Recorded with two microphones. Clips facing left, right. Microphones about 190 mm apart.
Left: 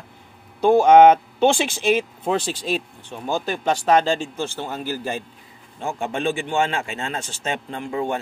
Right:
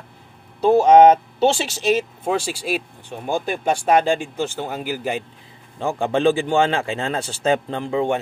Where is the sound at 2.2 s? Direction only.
10° right (ahead or behind).